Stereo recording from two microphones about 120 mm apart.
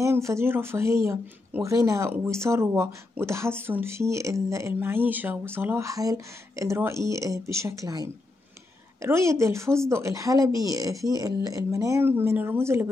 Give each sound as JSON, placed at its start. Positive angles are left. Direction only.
{"t": 0.0, "sound": "speech", "side_deg": -25}